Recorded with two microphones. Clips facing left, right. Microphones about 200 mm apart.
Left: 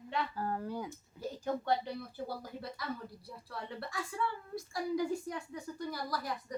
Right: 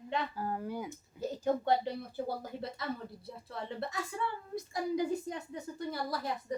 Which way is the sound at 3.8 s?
20° right (ahead or behind).